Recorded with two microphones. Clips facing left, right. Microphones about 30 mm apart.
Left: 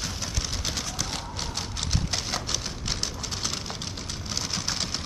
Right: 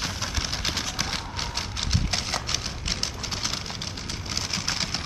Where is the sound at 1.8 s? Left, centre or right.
Centre.